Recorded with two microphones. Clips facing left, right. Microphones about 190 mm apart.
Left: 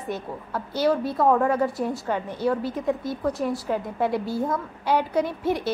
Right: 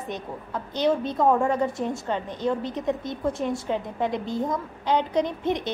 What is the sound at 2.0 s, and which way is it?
A woman's voice, 10° left (ahead or behind).